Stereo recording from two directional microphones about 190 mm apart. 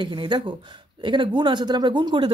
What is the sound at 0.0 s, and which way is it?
Speech, 25° right (ahead or behind).